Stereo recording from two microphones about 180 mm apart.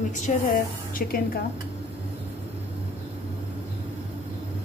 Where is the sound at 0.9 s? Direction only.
55° left (ahead or behind).